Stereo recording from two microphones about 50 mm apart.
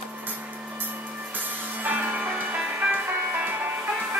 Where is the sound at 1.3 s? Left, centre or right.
Right.